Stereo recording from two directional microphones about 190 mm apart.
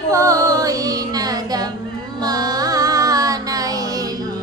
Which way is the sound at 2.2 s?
20° right (ahead or behind).